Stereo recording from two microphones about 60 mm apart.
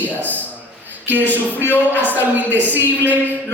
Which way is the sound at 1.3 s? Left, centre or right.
Left.